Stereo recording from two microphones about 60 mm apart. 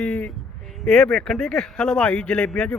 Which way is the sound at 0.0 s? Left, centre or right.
Left.